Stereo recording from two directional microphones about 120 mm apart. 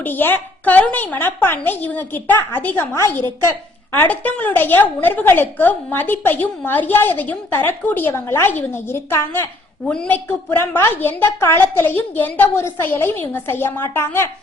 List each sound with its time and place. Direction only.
0.0 s a woman's voice: 15° left (ahead or behind)